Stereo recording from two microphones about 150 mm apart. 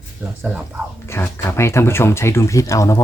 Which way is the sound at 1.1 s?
15° left (ahead or behind).